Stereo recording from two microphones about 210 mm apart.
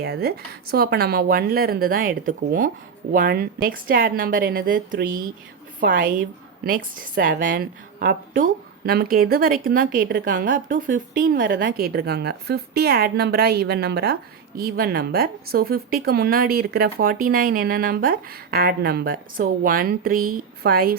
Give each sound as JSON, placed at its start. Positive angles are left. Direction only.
{"t": 0.0, "sound": "speech", "side_deg": -50}